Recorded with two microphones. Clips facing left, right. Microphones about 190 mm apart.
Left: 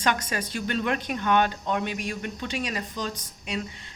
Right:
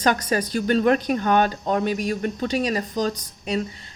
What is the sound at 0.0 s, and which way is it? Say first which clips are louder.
Speech: right 6 dB; 40° right (ahead or behind).